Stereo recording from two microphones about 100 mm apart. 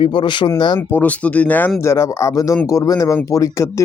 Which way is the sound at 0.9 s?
15° left (ahead or behind).